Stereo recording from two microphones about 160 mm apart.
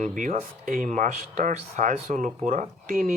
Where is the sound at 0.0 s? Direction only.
50° right (ahead or behind).